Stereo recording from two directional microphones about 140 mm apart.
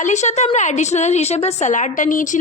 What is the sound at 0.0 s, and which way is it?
A woman's voice, 55° left (ahead or behind).